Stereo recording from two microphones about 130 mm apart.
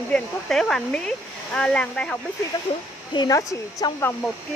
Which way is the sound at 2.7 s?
50° left (ahead or behind).